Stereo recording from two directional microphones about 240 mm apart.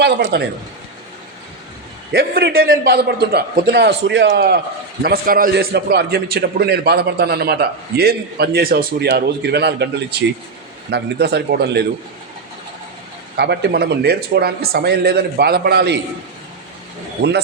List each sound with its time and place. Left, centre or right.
0.0 s a man's voice: right
2.1 s a man's voice: right
13.3 s a man's voice: right
17.2 s a man's voice: right